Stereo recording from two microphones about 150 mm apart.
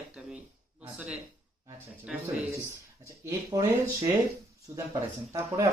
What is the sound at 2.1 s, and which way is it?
Speech, 5° right (ahead or behind).